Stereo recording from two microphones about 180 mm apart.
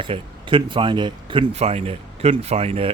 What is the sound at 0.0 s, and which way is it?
Speech, 25° right (ahead or behind).